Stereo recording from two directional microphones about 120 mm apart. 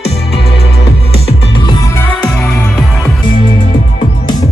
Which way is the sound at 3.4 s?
45° left (ahead or behind).